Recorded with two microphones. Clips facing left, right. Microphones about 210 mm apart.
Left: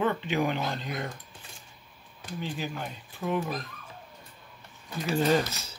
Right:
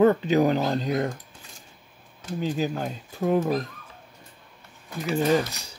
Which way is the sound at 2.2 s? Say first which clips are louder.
Right 8 dB; 40° right (ahead or behind).